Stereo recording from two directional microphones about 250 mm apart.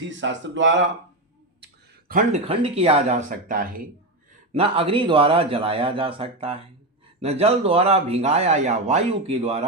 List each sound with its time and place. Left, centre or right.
0.1 s speech: right
1.6 s a sound: right
2.5 s speech: right
4.5 s speech: right